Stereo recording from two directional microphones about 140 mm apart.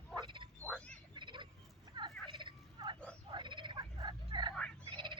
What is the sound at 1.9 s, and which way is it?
Turkey, 35° right (ahead or behind).